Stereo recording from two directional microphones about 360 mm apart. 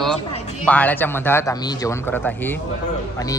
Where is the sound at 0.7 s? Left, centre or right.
Centre.